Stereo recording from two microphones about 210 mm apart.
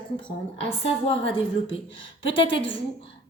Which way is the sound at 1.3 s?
25° left (ahead or behind).